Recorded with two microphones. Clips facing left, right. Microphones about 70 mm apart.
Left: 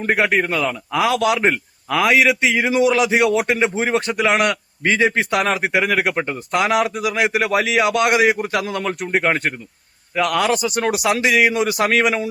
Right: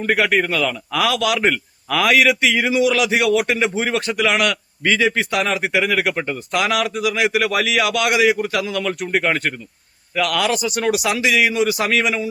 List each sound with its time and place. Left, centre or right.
0.0 s a man's voice: left
2.7 s a man's voice: left
9.1 s a man's voice: left